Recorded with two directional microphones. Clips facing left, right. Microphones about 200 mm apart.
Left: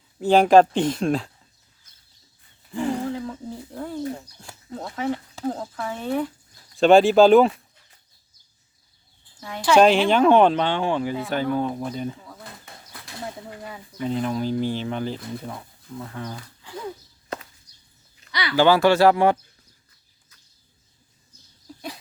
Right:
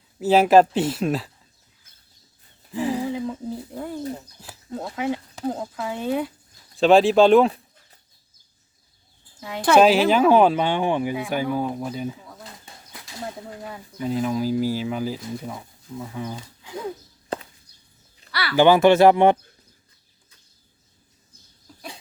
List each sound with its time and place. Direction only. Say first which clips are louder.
0.2 s speech: even; 5° right (ahead or behind)
2.7 s a sound: right 1 dB; 5° right (ahead or behind)
4.1 s speech: even; 5° right (ahead or behind)
6.7 s speech: left 1 dB; centre (ahead or behind)
9.7 s speech: even; 5° right (ahead or behind)
13.6 s speech: left 1 dB; centre (ahead or behind)
17.3 s chop: right 4 dB; 30° right (ahead or behind)
17.7 s dog: right 2 dB; 55° right (ahead or behind)
18.3 s a sound: even; 15° left (ahead or behind)
18.5 s speech: right 2 dB; 20° right (ahead or behind)